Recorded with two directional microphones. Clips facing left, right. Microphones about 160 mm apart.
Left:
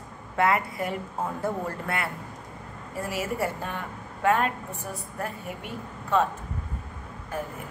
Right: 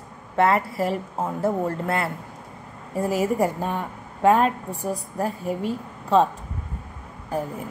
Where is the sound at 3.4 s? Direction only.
35° right (ahead or behind).